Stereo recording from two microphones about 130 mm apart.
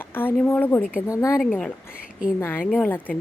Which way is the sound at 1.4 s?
Centre (ahead or behind).